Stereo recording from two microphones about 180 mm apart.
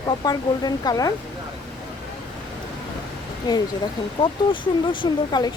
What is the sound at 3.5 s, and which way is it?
Speech, 20° left (ahead or behind).